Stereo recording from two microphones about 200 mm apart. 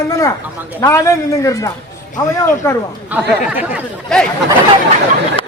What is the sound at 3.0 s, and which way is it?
Speech, 10° right (ahead or behind).